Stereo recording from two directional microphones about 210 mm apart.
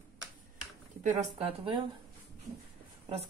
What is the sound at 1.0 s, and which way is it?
Speech, 30° right (ahead or behind).